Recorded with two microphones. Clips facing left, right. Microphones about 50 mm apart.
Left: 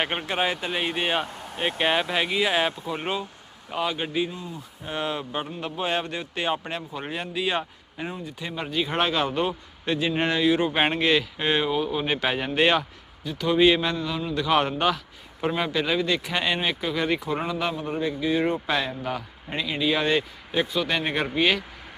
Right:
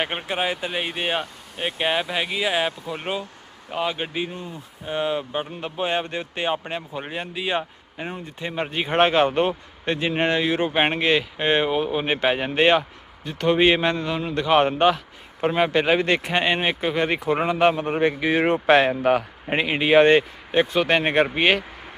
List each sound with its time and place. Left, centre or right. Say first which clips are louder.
0.0 s speech: even; centre
3.7 s speech: right 1 dB; centre
4.3 s a man's voice: right 2 dB; right
4.9 s speech: right 4 dB; centre
8.4 s a man's voice: right 2 dB; right
10.7 s a man's voice: right 2 dB; centre
13.2 s a man's voice: right 1 dB; right
14.4 s a man's voice: right 5 dB; right
16.0 s speech: right 3 dB; right
16.3 s a man's voice: right 4 dB; right
18.6 s a man's voice: right 10 dB; right